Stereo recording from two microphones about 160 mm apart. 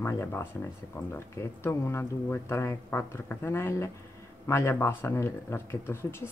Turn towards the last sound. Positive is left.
turn(degrees=15)  # may be behind; listen again after turning